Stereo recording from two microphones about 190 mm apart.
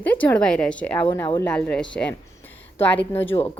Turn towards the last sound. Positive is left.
turn(degrees=10)  # may be behind; listen again after turning